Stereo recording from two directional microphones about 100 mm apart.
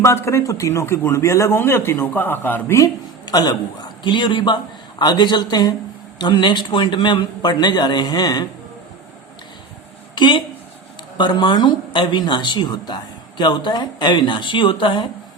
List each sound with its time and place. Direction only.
0.0 s a man's voice: 25° left (ahead or behind)
3.2 s speech: 45° left (ahead or behind)
10.2 s speech: 50° left (ahead or behind)